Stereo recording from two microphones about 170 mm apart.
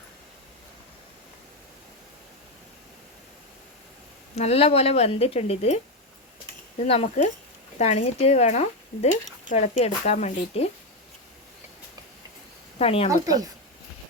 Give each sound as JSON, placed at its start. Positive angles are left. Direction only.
{"t": 4.4, "sound": "speech", "side_deg": 40}
{"t": 6.8, "sound": "speech", "side_deg": 35}
{"t": 12.8, "sound": "speech", "side_deg": 35}
{"t": 13.1, "sound": "speech", "side_deg": -20}